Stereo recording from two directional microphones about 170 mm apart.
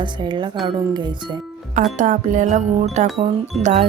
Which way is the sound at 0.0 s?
25° right (ahead or behind).